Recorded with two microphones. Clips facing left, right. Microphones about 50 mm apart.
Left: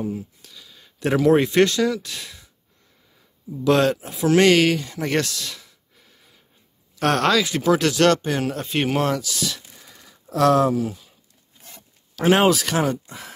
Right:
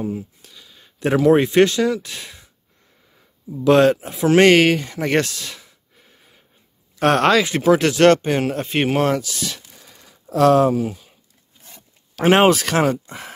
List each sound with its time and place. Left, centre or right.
0.0 s speech: centre
3.6 s speech: right
12.2 s speech: right